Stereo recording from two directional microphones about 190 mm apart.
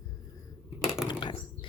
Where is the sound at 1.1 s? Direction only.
25° left (ahead or behind).